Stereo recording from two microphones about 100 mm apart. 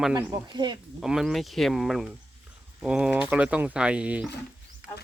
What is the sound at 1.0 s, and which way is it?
A man's voice, 5° right (ahead or behind).